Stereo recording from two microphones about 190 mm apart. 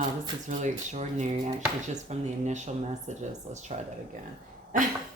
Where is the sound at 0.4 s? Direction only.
40° right (ahead or behind).